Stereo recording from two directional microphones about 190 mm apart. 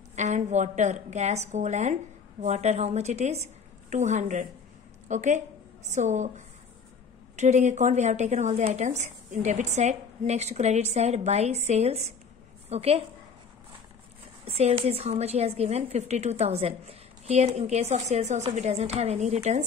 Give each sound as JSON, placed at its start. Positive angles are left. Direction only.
{"t": 0.1, "sound": "a woman's voice", "side_deg": -40}
{"t": 14.4, "sound": "a woman's voice", "side_deg": -30}